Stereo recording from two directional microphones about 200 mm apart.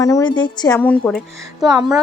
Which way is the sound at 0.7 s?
5° left (ahead or behind).